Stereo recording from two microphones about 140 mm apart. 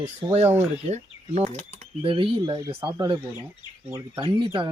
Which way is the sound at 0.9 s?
55° right (ahead or behind).